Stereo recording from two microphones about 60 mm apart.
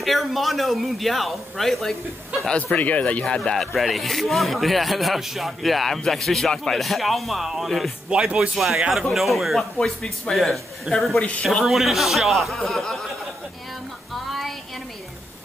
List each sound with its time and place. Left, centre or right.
0.0 s speech: centre
2.7 s speech: left
3.3 s a man's voice: centre
8.1 s speech: centre
9.8 s a man's voice: centre
11.1 s speech: left
11.6 s speech: centre
14.1 s child singing: centre